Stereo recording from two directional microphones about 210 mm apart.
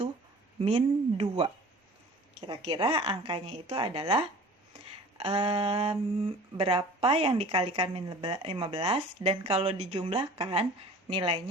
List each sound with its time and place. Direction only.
0.6 s a woman's voice: 30° right (ahead or behind)
2.5 s a woman's voice: 20° right (ahead or behind)